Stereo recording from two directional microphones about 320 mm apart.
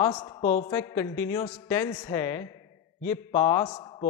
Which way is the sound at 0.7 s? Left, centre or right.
Centre.